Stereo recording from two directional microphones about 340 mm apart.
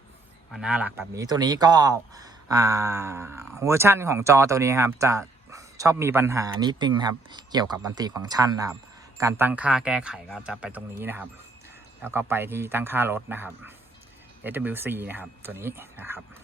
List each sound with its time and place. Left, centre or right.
0.5 s speech: centre